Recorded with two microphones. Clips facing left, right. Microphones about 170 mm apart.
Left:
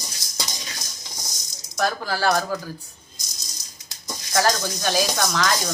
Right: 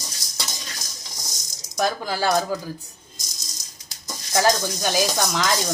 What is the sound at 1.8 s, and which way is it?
Speech, 20° right (ahead or behind).